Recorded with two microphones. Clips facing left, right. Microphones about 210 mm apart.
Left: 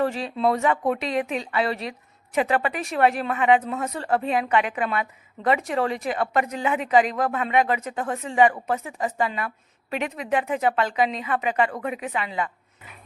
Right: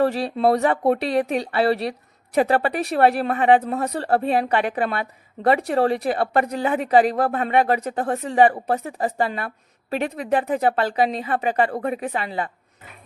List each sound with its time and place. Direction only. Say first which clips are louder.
0.0 s speech: right 4 dB; 35° right (ahead or behind)